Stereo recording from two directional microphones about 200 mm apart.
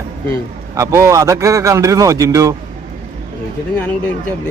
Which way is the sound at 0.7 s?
15° right (ahead or behind).